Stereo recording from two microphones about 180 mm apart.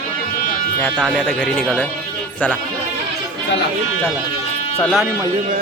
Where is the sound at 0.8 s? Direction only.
10° left (ahead or behind).